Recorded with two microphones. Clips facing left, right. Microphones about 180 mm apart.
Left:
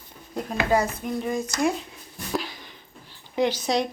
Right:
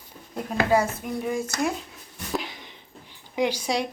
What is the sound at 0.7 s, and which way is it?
Speech, 10° right (ahead or behind).